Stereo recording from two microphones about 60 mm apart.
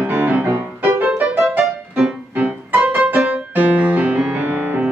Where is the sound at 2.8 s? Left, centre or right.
Right.